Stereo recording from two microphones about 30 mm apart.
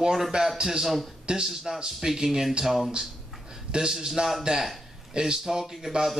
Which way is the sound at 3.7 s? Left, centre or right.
Right.